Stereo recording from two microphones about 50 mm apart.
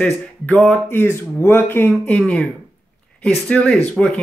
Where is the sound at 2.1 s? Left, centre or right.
Left.